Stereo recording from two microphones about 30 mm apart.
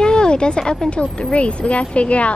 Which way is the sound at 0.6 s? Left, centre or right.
Centre.